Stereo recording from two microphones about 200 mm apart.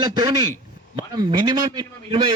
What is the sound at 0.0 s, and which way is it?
A man's voice, 20° right (ahead or behind).